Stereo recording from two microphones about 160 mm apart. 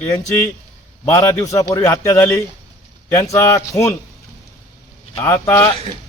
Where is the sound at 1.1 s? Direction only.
20° left (ahead or behind).